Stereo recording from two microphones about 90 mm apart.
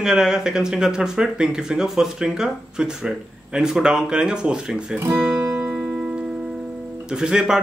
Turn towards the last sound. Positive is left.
turn(degrees=-10)  # may be behind; listen again after turning